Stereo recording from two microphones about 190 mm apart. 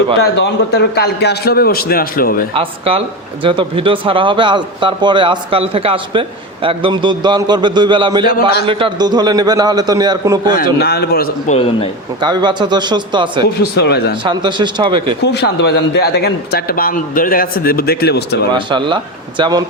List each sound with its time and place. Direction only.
0.3 s a man's voice: 60° left (ahead or behind)
2.6 s speech: 30° right (ahead or behind)
10.5 s speech: 55° left (ahead or behind)
11.4 s a man's voice: 30° left (ahead or behind)
12.2 s speech: 25° right (ahead or behind)
13.6 s speech: 60° left (ahead or behind)
14.3 s speech: 25° right (ahead or behind)
15.2 s speech: 60° left (ahead or behind)
18.5 s speech: 25° right (ahead or behind)